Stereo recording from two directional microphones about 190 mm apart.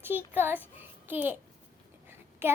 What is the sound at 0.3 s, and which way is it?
A child's voice, 10° right (ahead or behind).